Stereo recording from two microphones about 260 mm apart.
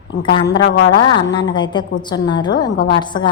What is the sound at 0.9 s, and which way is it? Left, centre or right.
A woman's voice, centre.